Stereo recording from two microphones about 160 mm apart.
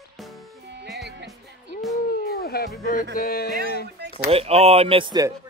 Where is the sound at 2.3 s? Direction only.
80° left.